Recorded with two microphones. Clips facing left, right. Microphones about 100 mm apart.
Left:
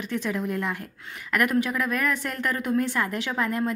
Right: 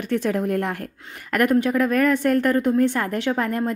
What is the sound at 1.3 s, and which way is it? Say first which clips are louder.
A woman's voice: right 5 dB; 35° right (ahead or behind).